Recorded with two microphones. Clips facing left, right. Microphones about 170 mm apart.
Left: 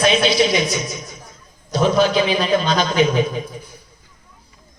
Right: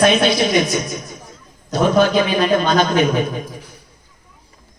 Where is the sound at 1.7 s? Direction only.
50° right (ahead or behind).